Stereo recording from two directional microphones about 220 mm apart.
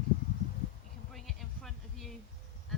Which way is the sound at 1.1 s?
Centre (ahead or behind).